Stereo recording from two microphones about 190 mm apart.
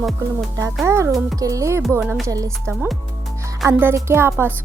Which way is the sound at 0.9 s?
15° right (ahead or behind).